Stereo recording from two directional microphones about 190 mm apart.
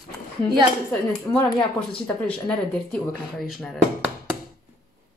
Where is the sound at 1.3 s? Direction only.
25° left (ahead or behind).